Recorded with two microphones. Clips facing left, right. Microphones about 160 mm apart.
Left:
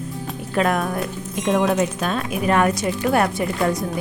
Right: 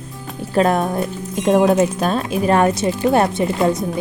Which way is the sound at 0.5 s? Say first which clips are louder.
Right 4 dB; 30° right (ahead or behind).